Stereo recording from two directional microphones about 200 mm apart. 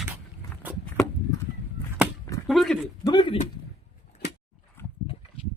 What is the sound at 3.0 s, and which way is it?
Speech, 25° left (ahead or behind).